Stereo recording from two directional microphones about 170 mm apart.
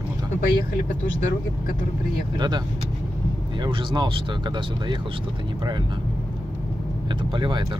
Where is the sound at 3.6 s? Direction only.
25° right (ahead or behind).